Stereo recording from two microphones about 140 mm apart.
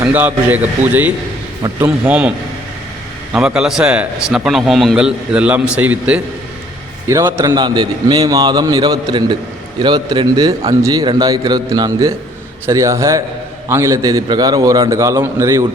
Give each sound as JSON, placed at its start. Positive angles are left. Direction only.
{"t": 0.0, "sound": "a man's voice", "side_deg": -10}
{"t": 3.3, "sound": "a man's voice", "side_deg": -5}
{"t": 7.1, "sound": "a man's voice", "side_deg": -25}